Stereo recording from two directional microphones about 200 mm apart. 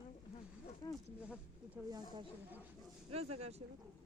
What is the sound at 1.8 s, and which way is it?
Speech, 10° right (ahead or behind).